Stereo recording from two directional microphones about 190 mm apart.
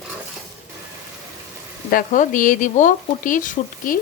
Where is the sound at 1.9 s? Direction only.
45° left (ahead or behind).